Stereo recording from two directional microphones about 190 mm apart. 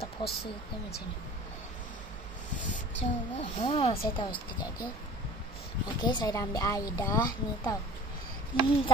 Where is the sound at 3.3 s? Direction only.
30° left (ahead or behind).